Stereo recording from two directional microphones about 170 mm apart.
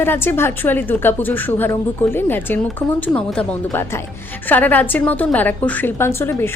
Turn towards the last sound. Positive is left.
turn(degrees=15)  # may be behind; listen again after turning